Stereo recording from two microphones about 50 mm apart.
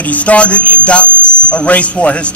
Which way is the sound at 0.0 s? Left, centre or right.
Left.